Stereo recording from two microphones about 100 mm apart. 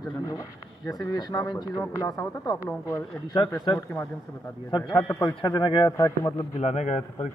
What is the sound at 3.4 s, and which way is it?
Speech, 60° left (ahead or behind).